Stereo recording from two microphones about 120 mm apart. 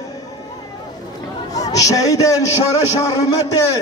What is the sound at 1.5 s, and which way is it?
A man's voice, 30° left (ahead or behind).